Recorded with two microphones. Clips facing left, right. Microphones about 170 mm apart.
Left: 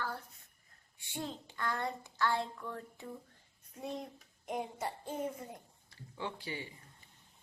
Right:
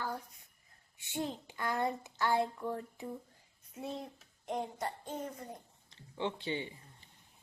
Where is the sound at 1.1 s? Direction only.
15° right (ahead or behind).